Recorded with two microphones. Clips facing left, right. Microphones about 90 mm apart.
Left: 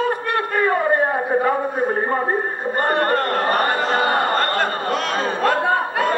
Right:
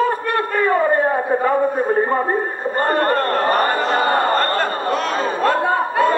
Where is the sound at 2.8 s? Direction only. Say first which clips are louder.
Right 2 dB; 35° right (ahead or behind).